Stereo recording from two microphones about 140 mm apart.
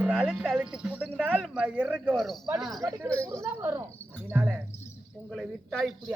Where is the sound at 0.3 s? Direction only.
Centre (ahead or behind).